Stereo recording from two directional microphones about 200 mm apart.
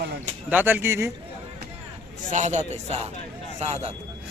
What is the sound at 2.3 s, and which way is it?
Speech, 35° right (ahead or behind).